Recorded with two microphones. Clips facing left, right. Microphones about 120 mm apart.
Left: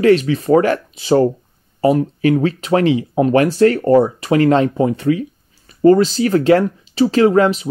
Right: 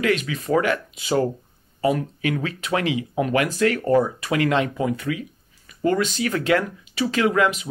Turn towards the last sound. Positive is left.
turn(degrees=35)  # may be behind; listen again after turning